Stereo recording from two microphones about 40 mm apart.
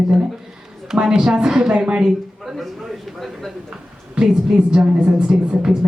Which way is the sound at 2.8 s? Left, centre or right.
Centre.